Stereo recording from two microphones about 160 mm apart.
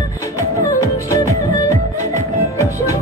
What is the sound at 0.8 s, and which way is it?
Music, 20° left (ahead or behind).